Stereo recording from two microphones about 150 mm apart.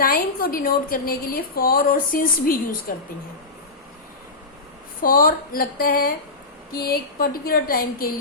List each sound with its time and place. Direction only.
0.0 s a woman's voice: 75° left (ahead or behind)
4.9 s a woman's voice: 70° left (ahead or behind)
6.7 s a woman's voice: 80° left